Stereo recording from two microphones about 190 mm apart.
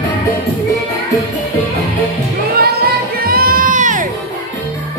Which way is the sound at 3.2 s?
50° right (ahead or behind).